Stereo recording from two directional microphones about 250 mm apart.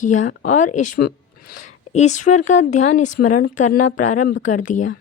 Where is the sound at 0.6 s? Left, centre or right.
Left.